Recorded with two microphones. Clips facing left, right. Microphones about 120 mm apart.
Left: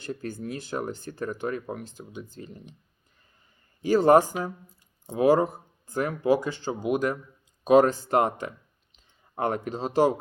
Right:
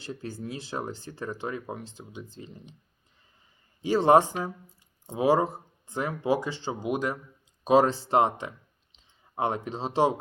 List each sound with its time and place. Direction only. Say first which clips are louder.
0.0 s speech: left 3 dB; 25° right (ahead or behind)
3.8 s speech: left 2 dB; 25° right (ahead or behind)